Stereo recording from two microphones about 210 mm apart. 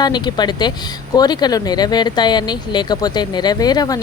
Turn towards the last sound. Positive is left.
turn(degrees=20)  # may be behind; listen again after turning